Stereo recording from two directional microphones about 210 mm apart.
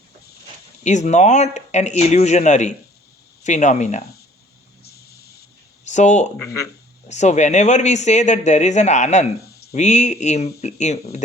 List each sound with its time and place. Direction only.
0.9 s speech: 35° left (ahead or behind)
4.8 s a sound: 50° left (ahead or behind)
5.9 s speech: 35° left (ahead or behind)